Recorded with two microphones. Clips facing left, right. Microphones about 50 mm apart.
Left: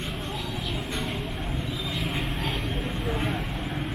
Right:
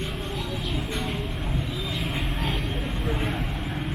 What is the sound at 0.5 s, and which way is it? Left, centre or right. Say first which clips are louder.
Vehicle: right 2 dB; centre.